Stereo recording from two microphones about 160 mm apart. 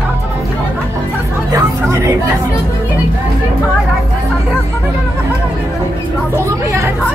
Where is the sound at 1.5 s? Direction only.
20° right (ahead or behind).